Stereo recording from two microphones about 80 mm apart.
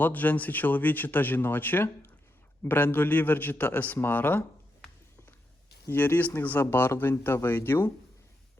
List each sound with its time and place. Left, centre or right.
0.0 s speech: left
5.9 s speech: left